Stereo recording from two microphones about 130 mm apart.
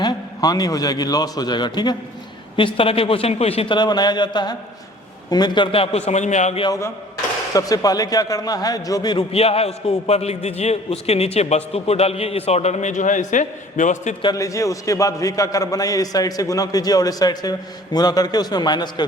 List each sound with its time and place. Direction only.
0.0 s a man's voice: 30° left (ahead or behind); by 3.8 s 50° left (ahead or behind)
3.8 s a sound: 30° left (ahead or behind)
6.1 s a man's voice: 65° left (ahead or behind)
6.7 s a man's voice: 20° left (ahead or behind)
9.1 s a man's voice: 50° left (ahead or behind); by 13.9 s 75° left (ahead or behind)
14.3 s a man's voice: 25° left (ahead or behind)